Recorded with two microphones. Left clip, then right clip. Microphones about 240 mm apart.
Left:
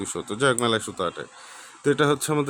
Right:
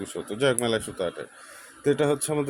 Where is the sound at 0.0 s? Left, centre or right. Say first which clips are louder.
Left 2 dB; centre.